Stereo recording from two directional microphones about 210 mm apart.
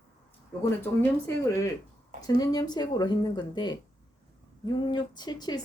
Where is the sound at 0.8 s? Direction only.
10° left (ahead or behind).